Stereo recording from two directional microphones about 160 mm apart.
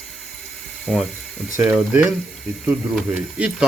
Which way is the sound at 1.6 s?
15° right (ahead or behind).